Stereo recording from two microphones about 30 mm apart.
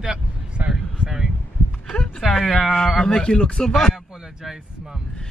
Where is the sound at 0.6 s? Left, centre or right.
Right.